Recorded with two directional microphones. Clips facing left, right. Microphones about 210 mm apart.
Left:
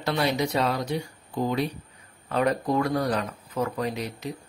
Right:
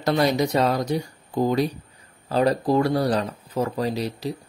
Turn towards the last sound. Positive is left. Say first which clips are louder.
# right 4 dB
turn(degrees=-35)  # may be behind; listen again after turning